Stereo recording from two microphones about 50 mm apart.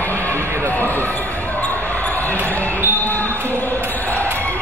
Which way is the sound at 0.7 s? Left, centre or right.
Left.